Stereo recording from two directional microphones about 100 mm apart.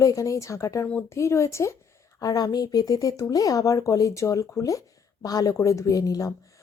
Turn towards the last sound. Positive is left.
turn(degrees=35)  # may be behind; listen again after turning